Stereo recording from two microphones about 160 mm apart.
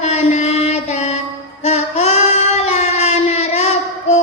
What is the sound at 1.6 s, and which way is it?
Child singing, 45° left (ahead or behind).